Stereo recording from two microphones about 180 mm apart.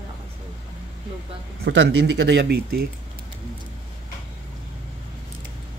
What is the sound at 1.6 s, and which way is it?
Speech, 75° right (ahead or behind).